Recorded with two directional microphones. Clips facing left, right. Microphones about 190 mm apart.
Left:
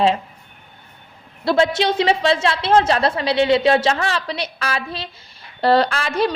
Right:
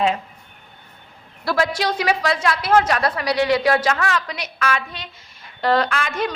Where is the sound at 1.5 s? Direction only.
25° left (ahead or behind).